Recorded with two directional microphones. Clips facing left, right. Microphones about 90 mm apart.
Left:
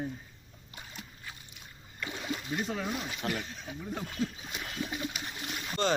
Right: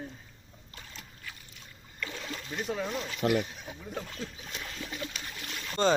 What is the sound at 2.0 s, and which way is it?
Splash, 15° left (ahead or behind).